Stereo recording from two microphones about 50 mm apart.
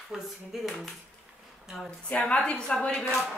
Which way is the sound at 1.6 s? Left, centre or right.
Centre.